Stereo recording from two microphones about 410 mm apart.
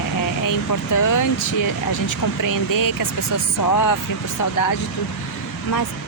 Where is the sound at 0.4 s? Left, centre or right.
Left.